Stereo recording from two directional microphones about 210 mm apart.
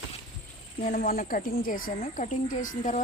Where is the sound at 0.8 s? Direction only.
45° left (ahead or behind).